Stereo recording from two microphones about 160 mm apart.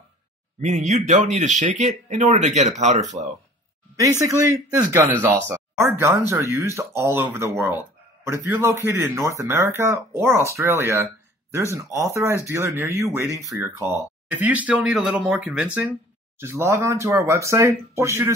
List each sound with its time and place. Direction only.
0.6 s speech: 45° right (ahead or behind)
4.2 s speech: 20° right (ahead or behind)